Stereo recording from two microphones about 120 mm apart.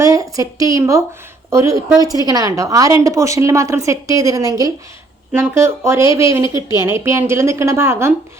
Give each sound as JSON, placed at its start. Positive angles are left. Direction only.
{"t": 0.0, "sound": "a woman's voice", "side_deg": -30}